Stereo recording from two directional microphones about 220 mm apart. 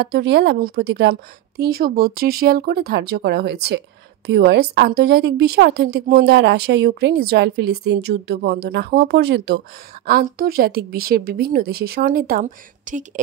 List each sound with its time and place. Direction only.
0.0 s a woman's voice: 50° right (ahead or behind); by 13.2 s 35° right (ahead or behind)